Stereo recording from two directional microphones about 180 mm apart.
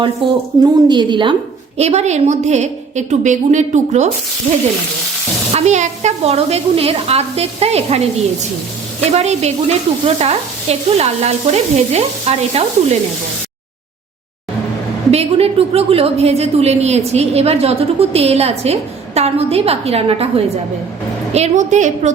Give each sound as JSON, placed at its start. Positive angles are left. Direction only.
{"t": 0.2, "sound": "a woman's voice", "side_deg": -30}
{"t": 1.8, "sound": "a woman's voice", "side_deg": -35}
{"t": 5.5, "sound": "a woman's voice", "side_deg": -40}
{"t": 9.1, "sound": "a woman's voice", "side_deg": -35}
{"t": 15.1, "sound": "a woman's voice", "side_deg": -35}